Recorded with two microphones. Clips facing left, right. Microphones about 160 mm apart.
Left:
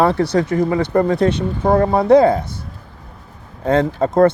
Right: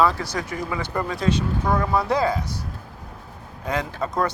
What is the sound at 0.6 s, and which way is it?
Speech, 55° left (ahead or behind).